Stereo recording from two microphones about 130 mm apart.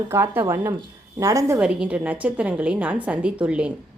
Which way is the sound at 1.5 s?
10° right (ahead or behind).